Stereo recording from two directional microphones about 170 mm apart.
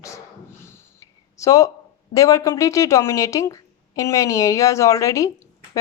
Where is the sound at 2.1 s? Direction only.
20° left (ahead or behind).